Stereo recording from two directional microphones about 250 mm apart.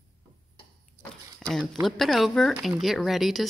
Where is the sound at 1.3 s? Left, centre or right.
Centre.